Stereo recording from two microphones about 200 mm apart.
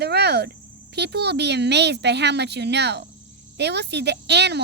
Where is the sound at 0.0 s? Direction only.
55° right (ahead or behind).